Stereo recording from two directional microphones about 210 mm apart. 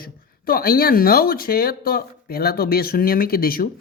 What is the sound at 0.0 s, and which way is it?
Speech, 45° left (ahead or behind).